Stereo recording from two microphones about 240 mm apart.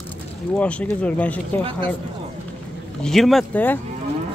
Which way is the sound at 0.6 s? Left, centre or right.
Centre.